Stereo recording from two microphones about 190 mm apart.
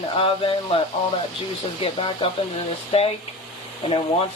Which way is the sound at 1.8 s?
25° left (ahead or behind).